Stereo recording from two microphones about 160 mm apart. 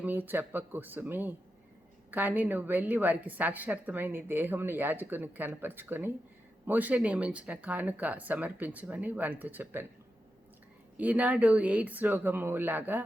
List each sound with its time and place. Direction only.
0.0 s a woman's voice: 10° right (ahead or behind)
10.9 s a woman's voice: 10° right (ahead or behind)